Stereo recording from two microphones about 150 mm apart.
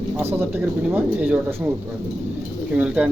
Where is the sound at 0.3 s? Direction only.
15° right (ahead or behind).